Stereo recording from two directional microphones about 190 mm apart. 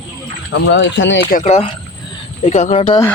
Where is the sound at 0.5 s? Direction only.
70° left (ahead or behind).